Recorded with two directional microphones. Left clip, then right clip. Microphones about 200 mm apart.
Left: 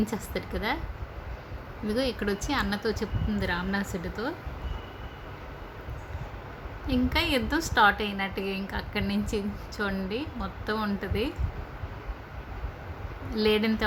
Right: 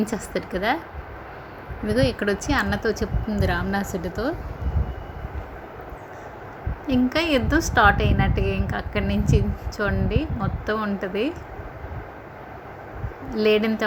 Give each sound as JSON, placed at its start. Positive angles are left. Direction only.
{"t": 0.0, "sound": "a woman's voice", "side_deg": -5}
{"t": 1.9, "sound": "a woman's voice", "side_deg": -5}
{"t": 6.8, "sound": "a woman's voice", "side_deg": -5}
{"t": 13.3, "sound": "a woman's voice", "side_deg": -5}